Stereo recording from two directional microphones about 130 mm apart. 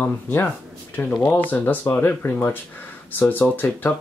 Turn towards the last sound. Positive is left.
turn(degrees=15)  # may be behind; listen again after turning